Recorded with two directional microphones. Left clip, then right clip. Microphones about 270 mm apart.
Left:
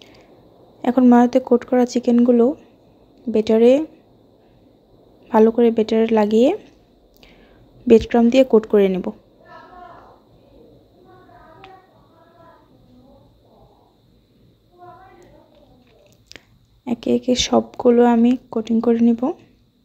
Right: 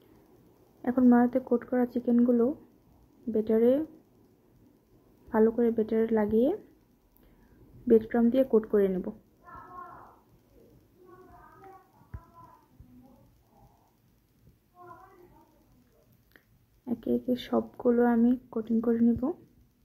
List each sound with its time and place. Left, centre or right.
0.8 s speech: left
5.3 s speech: left
7.8 s speech: left
16.3 s speech: left